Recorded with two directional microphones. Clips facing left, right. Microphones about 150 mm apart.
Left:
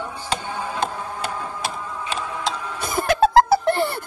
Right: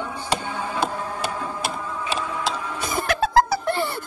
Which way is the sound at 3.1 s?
55° left (ahead or behind).